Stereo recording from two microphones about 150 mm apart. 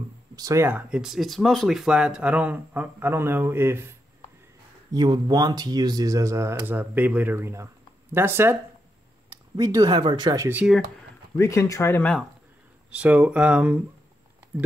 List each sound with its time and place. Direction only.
0.4 s speech: 20° right (ahead or behind)
4.9 s speech: 30° right (ahead or behind)
11.3 s speech: 20° left (ahead or behind)
12.9 s speech: 10° right (ahead or behind)